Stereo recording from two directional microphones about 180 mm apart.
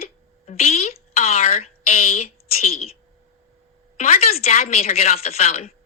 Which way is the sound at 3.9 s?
35° left (ahead or behind).